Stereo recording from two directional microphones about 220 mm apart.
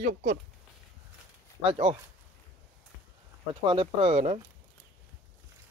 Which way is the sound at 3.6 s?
25° right (ahead or behind).